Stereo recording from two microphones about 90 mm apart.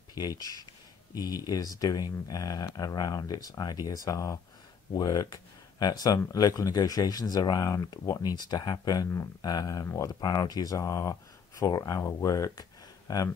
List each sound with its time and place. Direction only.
0.1 s speech: 45° left (ahead or behind)
10.0 s speech: 55° left (ahead or behind)
12.0 s speech: 35° left (ahead or behind)